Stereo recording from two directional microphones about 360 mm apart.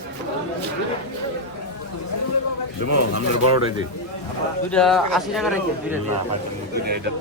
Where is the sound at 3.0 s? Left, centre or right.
Left.